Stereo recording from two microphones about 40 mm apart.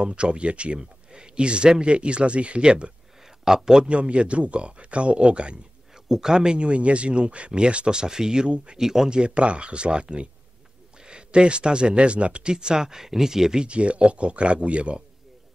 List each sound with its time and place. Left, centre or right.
0.0 s speech: right
3.4 s speech: centre
3.8 s speech: right
6.0 s speech: centre
9.1 s speech: right
13.7 s speech: right